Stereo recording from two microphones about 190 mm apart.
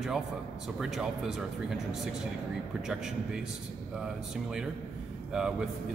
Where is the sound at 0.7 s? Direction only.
Centre (ahead or behind).